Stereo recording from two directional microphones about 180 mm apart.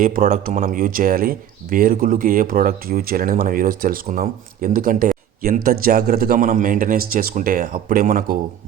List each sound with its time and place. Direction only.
0.4 s speech: 50° right (ahead or behind)